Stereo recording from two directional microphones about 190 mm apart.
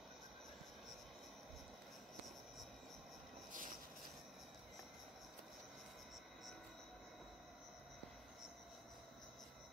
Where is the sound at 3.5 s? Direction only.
45° right (ahead or behind).